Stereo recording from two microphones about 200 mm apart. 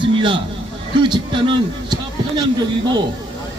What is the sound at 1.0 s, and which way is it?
Speech, 25° right (ahead or behind).